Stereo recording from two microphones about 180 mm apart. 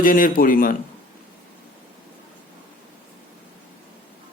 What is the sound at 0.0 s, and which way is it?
Speech, 50° left (ahead or behind).